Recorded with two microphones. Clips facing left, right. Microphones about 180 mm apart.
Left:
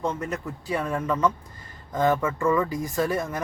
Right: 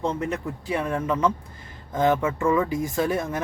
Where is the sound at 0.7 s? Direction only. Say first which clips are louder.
Right 1 dB; 15° right (ahead or behind).